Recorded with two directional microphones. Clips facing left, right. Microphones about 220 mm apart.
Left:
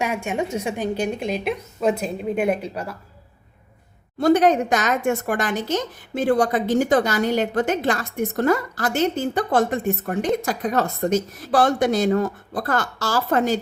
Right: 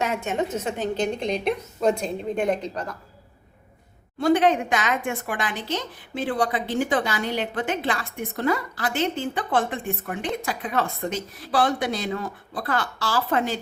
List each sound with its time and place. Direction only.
0.0 s a woman's voice: 10° left (ahead or behind)
4.2 s a woman's voice: 40° left (ahead or behind)